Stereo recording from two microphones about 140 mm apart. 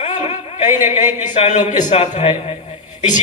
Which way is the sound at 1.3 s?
55° left (ahead or behind).